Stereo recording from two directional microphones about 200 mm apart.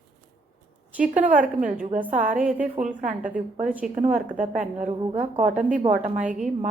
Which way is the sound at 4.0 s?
40° right (ahead or behind).